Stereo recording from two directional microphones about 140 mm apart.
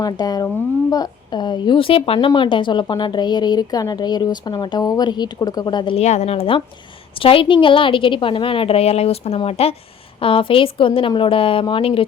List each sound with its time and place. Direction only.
0.0 s speech: 25° left (ahead or behind)
6.0 s a woman's voice: 50° left (ahead or behind)